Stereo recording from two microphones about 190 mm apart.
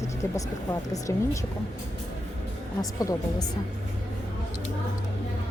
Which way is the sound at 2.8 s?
20° left (ahead or behind).